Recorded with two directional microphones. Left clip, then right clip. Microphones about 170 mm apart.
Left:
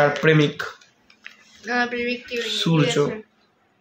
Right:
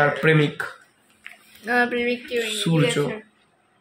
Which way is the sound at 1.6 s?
25° right (ahead or behind).